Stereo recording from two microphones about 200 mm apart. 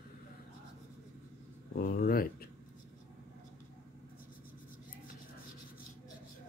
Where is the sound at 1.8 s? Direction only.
50° left (ahead or behind).